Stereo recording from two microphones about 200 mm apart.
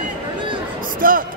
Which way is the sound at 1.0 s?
45° right (ahead or behind).